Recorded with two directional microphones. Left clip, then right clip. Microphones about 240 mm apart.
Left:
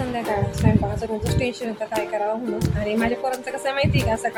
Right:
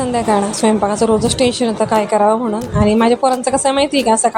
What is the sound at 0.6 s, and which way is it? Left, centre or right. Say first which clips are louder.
A woman's voice: right 11 dB; right.